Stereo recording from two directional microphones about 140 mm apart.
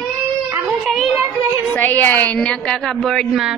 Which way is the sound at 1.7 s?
15° left (ahead or behind).